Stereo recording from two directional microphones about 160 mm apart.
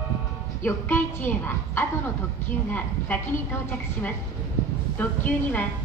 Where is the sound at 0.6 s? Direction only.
15° left (ahead or behind).